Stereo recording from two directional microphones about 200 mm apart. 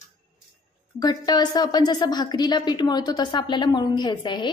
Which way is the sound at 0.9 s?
20° left (ahead or behind).